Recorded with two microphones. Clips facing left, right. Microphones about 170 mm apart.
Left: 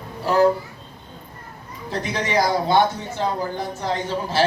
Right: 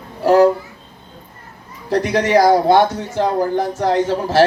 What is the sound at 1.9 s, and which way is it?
Speech, 75° right (ahead or behind).